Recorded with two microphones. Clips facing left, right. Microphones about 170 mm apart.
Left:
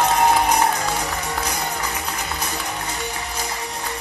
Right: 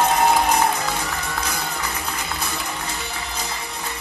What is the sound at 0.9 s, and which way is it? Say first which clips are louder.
Music: left 2 dB; 15° left (ahead or behind).